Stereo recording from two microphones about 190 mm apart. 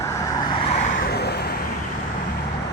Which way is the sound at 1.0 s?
55° left (ahead or behind).